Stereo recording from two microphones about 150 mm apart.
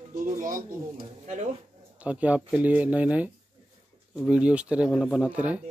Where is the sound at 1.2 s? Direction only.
50° right (ahead or behind).